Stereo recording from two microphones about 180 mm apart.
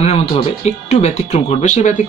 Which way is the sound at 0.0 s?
35° left (ahead or behind).